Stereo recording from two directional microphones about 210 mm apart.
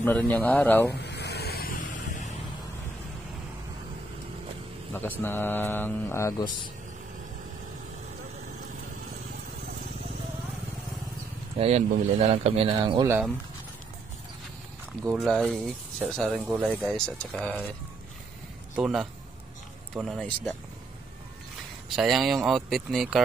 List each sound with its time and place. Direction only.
0.0 s speech: 10° left (ahead or behind)
1.0 s vehicle: 55° left (ahead or behind)
4.9 s speech: 10° left (ahead or behind)
11.5 s speech: 30° right (ahead or behind)
15.0 s speech: centre (ahead or behind)
18.8 s speech: centre (ahead or behind)
21.9 s speech: centre (ahead or behind)